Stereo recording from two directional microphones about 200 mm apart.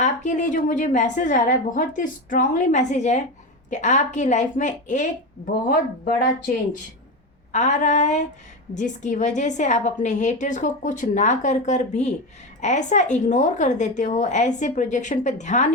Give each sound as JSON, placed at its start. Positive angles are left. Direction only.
{"t": 0.0, "sound": "a woman's voice", "side_deg": 35}
{"t": 7.5, "sound": "a woman's voice", "side_deg": 35}